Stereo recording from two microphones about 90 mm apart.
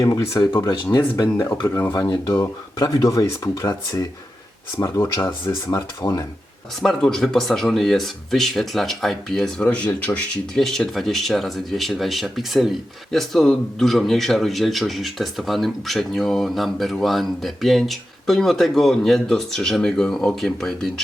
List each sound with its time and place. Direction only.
0.0 s speech: 40° left (ahead or behind)
2.0 s speech: 50° left (ahead or behind)
6.8 s speech: 5° left (ahead or behind)
9.6 s speech: 15° left (ahead or behind)
10.6 s speech: 5° left (ahead or behind)